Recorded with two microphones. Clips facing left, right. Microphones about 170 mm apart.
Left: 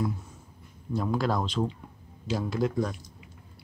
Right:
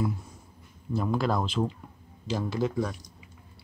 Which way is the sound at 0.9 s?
Centre (ahead or behind).